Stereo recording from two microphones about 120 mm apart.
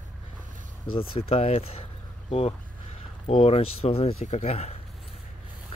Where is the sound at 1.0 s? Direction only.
50° left (ahead or behind).